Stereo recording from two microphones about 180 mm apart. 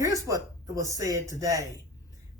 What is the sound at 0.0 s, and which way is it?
Speech, 20° right (ahead or behind).